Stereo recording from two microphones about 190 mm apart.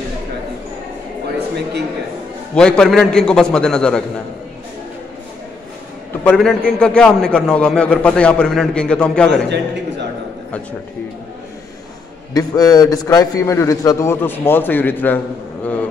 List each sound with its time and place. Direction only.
2.5 s a man's voice: 5° left (ahead or behind)
6.2 s a man's voice: 5° left (ahead or behind)
9.3 s a man's voice: 65° right (ahead or behind)
12.4 s a man's voice: 20° left (ahead or behind)